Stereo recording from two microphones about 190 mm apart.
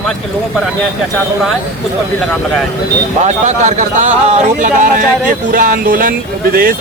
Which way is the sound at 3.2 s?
40° right (ahead or behind).